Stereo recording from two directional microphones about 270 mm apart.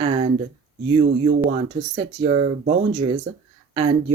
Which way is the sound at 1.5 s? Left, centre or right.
Centre.